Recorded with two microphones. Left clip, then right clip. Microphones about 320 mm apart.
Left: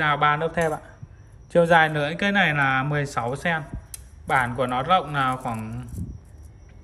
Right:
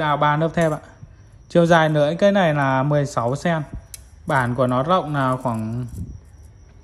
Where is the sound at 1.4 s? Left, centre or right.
Centre.